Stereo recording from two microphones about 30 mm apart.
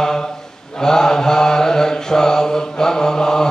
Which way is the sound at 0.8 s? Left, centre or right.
Centre.